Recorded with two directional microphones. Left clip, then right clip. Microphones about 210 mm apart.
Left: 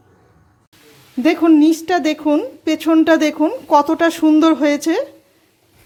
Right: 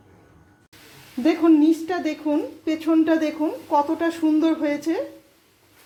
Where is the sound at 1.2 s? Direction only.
40° left (ahead or behind).